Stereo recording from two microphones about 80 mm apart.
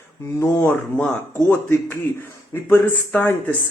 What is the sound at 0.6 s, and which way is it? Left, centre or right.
Speech, left.